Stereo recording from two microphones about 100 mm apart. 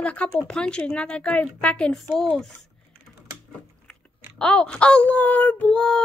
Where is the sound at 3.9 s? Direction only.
10° left (ahead or behind).